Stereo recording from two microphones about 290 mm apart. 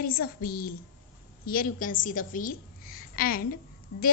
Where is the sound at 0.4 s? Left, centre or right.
Left.